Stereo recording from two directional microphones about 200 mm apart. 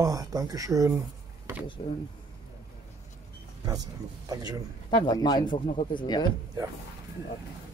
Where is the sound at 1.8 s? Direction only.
30° left (ahead or behind).